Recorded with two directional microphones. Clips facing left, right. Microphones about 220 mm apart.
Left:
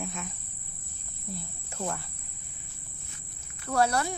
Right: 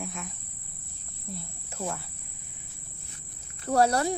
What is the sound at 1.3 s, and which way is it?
Speech, centre (ahead or behind).